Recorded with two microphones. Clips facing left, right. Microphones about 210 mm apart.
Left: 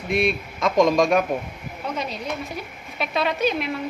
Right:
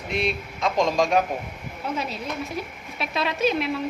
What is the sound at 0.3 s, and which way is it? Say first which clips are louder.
Speech: left 3 dB; 55° left (ahead or behind).